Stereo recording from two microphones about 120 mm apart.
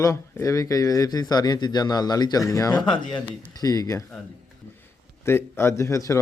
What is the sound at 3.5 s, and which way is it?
Speech, 30° left (ahead or behind).